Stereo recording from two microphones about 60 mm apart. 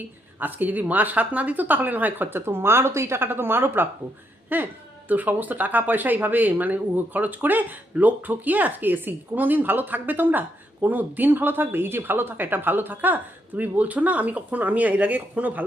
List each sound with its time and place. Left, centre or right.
0.3 s speech: right